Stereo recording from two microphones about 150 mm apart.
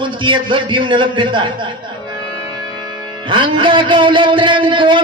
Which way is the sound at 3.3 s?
35° right (ahead or behind).